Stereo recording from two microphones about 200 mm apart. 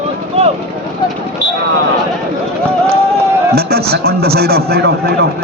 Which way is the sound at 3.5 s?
50° right (ahead or behind).